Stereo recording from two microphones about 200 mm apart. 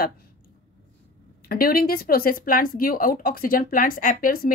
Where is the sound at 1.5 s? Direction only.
45° left (ahead or behind).